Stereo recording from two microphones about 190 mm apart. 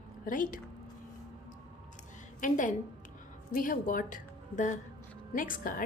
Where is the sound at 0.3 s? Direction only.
45° left (ahead or behind).